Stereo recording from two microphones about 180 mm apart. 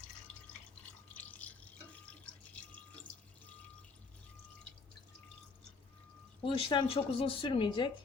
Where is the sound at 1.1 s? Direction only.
10° left (ahead or behind).